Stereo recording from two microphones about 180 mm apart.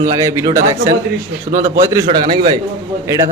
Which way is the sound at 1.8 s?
20° right (ahead or behind).